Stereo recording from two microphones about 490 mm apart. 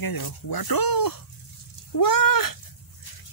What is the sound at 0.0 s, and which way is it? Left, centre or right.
Speech, left.